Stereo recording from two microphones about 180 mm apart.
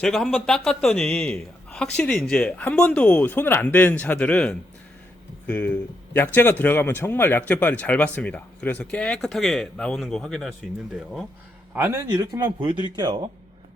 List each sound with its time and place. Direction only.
0.0 s a man's voice: centre (ahead or behind)
11.7 s speech: 15° right (ahead or behind)